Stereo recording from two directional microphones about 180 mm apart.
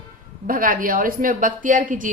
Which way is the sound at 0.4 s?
50° right (ahead or behind).